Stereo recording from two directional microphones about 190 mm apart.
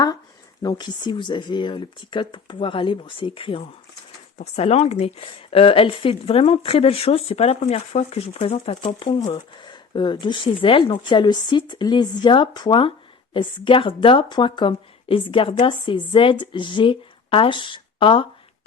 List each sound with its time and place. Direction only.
0.6 s speech: 20° left (ahead or behind)